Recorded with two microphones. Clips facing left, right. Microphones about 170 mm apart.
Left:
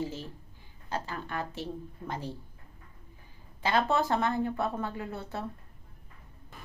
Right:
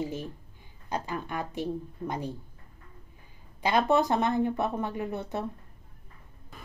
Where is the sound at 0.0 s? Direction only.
15° right (ahead or behind).